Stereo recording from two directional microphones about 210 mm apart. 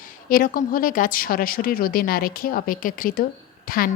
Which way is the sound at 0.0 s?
40° left (ahead or behind).